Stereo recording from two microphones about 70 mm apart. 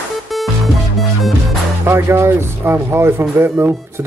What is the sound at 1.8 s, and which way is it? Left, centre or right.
A man's voice, right.